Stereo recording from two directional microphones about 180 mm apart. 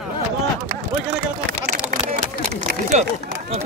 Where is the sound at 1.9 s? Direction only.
50° right (ahead or behind).